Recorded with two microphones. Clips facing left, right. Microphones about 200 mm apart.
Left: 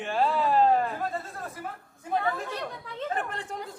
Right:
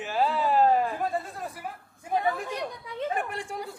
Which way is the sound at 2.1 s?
15° right (ahead or behind).